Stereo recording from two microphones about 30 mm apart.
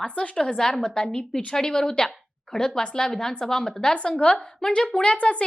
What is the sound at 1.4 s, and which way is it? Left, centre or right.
A woman's voice, left.